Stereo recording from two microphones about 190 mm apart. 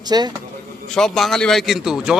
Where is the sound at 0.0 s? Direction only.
20° right (ahead or behind).